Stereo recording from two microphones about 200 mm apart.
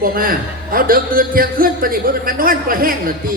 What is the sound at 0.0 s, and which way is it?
A woman's voice, 45° right (ahead or behind).